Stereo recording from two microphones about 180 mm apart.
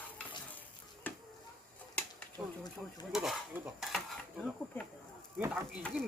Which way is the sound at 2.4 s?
Centre (ahead or behind).